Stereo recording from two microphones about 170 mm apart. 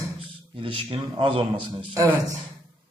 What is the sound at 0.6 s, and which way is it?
Speech, 30° right (ahead or behind).